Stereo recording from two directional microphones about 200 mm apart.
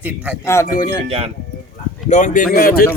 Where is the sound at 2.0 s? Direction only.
35° left (ahead or behind).